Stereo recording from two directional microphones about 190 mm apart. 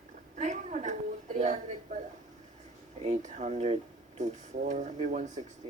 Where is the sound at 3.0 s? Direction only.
40° right (ahead or behind).